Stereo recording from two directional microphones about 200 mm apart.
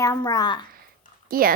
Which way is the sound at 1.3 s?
45° right (ahead or behind).